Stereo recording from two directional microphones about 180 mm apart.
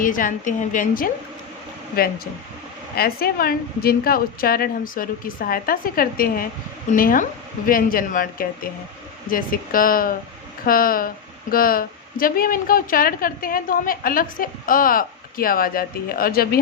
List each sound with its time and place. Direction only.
0.0 s a woman's voice: 50° left (ahead or behind)
2.9 s a woman's voice: 60° left (ahead or behind)